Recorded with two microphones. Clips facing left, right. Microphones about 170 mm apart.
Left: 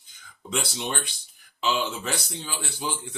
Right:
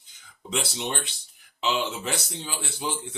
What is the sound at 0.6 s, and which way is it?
Speech, 20° right (ahead or behind).